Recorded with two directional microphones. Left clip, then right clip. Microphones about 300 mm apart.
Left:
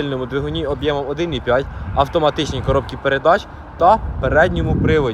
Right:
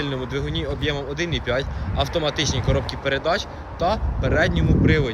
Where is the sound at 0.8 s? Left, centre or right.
Centre.